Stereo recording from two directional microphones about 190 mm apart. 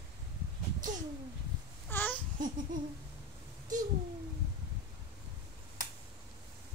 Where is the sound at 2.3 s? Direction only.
45° right (ahead or behind).